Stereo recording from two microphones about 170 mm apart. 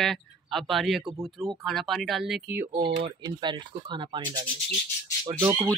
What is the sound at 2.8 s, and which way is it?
Speech, 25° right (ahead or behind).